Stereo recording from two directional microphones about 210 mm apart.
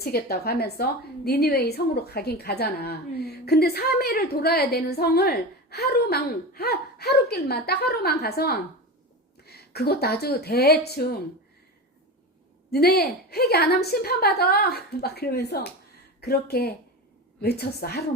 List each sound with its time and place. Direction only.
0.0 s a woman's voice: 50° left (ahead or behind)
12.7 s a woman's voice: 50° left (ahead or behind)